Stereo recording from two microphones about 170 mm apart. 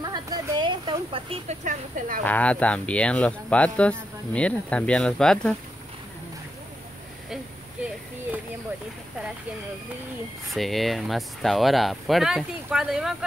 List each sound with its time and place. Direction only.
0.0 s a sound: 25° right (ahead or behind)
1.6 s speech: 50° right (ahead or behind)
2.2 s speech: 10° left (ahead or behind)
10.5 s speech: centre (ahead or behind)